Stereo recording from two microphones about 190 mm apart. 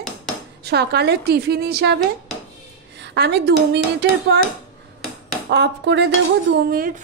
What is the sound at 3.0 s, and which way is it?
Speech, 65° right (ahead or behind).